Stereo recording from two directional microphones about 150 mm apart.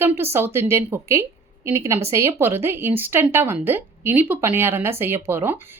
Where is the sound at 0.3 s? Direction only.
15° right (ahead or behind).